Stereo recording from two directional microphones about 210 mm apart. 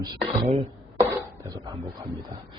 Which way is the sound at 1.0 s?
20° right (ahead or behind).